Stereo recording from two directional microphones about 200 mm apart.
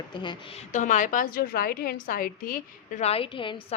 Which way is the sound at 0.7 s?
40° left (ahead or behind).